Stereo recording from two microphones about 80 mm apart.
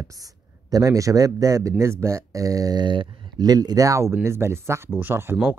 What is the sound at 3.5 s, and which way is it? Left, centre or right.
Speech, right.